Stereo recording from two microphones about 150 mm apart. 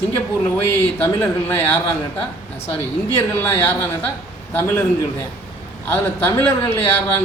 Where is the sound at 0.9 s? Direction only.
15° left (ahead or behind).